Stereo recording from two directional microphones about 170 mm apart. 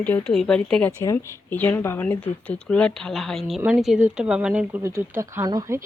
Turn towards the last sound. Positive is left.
turn(degrees=-20)  # may be behind; listen again after turning